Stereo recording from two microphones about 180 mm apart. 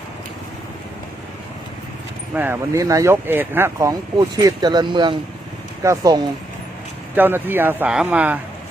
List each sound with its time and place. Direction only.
2.3 s speech: 10° right (ahead or behind)
7.2 s speech: 10° right (ahead or behind)